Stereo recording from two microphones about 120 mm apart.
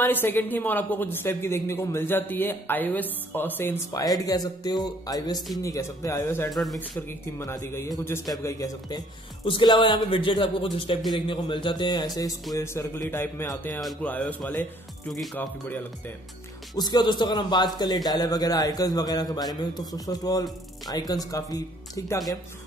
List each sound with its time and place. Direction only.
0.0 s a woman's voice: 15° left (ahead or behind)
4.0 s a man's voice: 30° left (ahead or behind)
6.5 s speech: centre (ahead or behind)
6.8 s speech: 20° left (ahead or behind)
9.4 s speech: 45° left (ahead or behind)
12.5 s a woman's voice: 20° left (ahead or behind)
16.7 s a man's voice: 35° left (ahead or behind)